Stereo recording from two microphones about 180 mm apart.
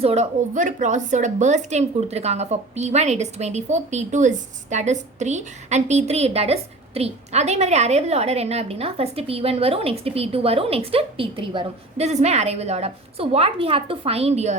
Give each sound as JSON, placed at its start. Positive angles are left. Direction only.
{"t": 0.0, "sound": "a woman's voice", "side_deg": -35}